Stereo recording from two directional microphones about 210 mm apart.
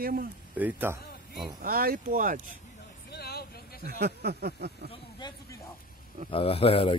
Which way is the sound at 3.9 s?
50° right (ahead or behind).